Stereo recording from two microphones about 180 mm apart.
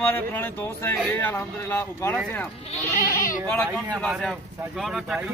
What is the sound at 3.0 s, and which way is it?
Speech, 50° left (ahead or behind).